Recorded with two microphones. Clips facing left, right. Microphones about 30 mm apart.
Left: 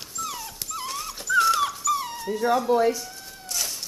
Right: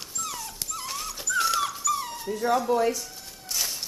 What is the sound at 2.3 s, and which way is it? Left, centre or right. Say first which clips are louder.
Speech: left 2 dB; centre.